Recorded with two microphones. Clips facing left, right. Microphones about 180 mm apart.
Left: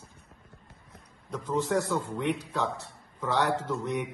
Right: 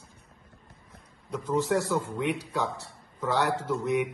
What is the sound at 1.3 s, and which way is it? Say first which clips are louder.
A man's voice: right 1 dB; 5° right (ahead or behind).